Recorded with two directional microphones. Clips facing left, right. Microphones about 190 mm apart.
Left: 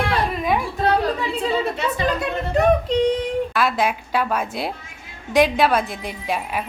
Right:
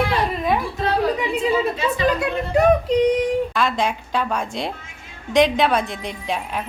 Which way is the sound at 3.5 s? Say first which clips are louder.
Left 1 dB; 5° left (ahead or behind).